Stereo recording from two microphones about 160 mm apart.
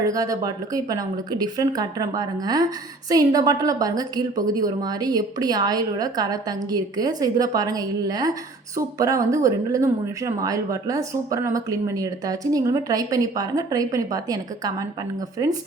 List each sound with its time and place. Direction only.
0.0 s speech: 20° right (ahead or behind)